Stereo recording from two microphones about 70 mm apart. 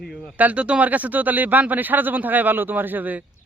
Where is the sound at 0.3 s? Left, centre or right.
Right.